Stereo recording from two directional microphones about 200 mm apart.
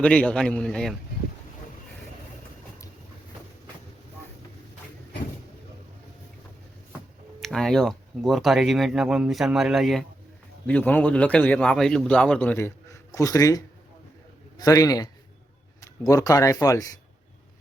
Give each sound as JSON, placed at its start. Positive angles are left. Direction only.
{"t": 0.0, "sound": "speech", "side_deg": 5}
{"t": 7.4, "sound": "a man's voice", "side_deg": 0}
{"t": 14.6, "sound": "a man's voice", "side_deg": 15}